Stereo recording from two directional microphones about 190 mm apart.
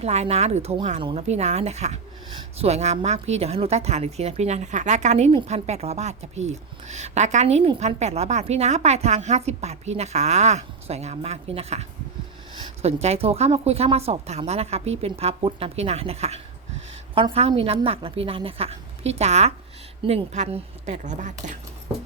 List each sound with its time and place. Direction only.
0.0 s a woman's voice: 35° right (ahead or behind)